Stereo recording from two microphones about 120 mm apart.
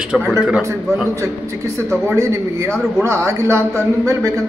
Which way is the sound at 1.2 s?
25° right (ahead or behind).